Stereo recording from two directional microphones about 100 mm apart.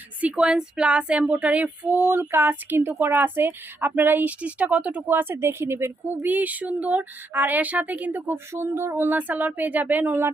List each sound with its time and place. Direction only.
0.2 s speech: 10° right (ahead or behind)